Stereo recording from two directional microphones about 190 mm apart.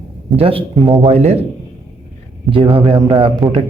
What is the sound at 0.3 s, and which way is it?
Speech, 30° right (ahead or behind).